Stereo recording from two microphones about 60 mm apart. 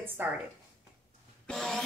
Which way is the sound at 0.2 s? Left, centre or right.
Right.